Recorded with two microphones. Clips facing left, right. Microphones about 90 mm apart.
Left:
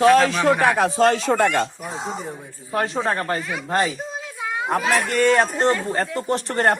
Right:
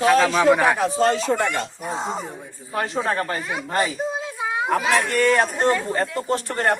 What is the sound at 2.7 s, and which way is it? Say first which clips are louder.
Speech: left 1 dB; 20° left (ahead or behind).